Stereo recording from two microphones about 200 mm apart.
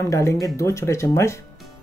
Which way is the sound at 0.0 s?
15° left (ahead or behind).